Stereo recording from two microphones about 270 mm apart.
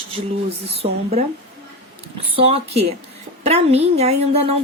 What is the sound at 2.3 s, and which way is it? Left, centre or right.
A woman's voice, right.